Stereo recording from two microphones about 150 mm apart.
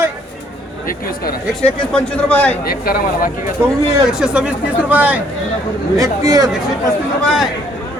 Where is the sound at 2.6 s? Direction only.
80° left.